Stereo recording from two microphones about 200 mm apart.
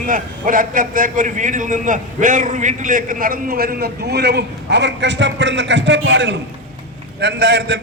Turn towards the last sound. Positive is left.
turn(degrees=-60)  # may be behind; listen again after turning